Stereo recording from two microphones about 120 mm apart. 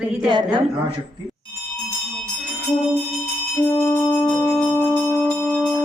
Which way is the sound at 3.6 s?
20° left (ahead or behind).